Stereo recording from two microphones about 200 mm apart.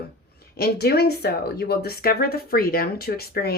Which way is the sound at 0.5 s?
50° left (ahead or behind).